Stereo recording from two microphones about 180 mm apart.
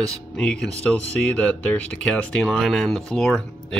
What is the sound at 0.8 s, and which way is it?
Speech, 5° left (ahead or behind).